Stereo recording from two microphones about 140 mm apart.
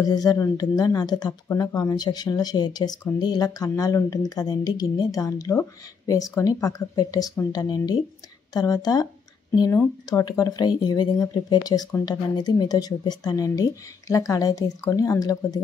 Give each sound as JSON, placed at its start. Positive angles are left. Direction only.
{"t": 0.0, "sound": "speech", "side_deg": 25}
{"t": 10.0, "sound": "speech", "side_deg": 25}